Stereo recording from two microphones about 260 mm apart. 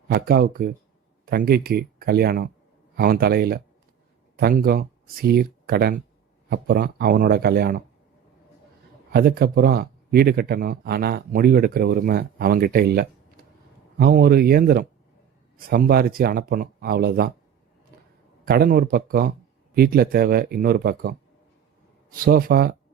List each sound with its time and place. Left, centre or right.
0.1 s speech: right
9.1 s speech: right
18.4 s speech: right
22.2 s speech: right